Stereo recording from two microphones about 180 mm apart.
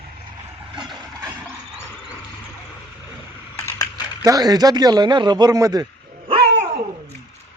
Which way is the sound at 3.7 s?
20° left (ahead or behind).